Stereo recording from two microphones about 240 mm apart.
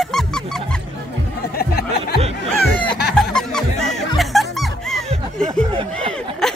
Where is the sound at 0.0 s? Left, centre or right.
Centre.